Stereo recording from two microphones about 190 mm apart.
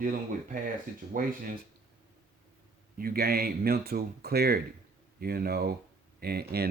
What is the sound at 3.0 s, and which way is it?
Speech, 50° right (ahead or behind).